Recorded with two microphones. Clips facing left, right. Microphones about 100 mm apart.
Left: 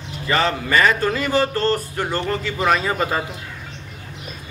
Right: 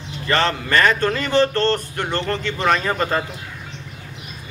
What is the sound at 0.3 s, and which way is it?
A man's voice, 5° left (ahead or behind).